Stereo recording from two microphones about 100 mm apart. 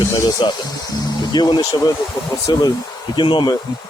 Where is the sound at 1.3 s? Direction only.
45° left (ahead or behind).